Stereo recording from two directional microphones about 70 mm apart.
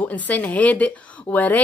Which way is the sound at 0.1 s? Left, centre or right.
Left.